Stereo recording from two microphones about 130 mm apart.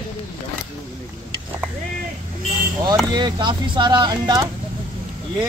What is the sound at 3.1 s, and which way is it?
Speech, 35° right (ahead or behind).